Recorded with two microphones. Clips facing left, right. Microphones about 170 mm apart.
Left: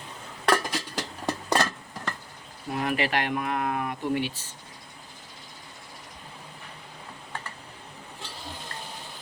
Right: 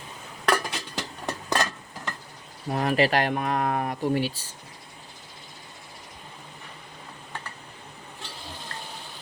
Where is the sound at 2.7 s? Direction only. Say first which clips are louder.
Right 4 dB; 35° right (ahead or behind).